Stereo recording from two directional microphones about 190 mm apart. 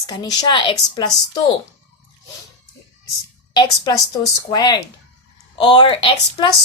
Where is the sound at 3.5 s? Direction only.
20° left (ahead or behind).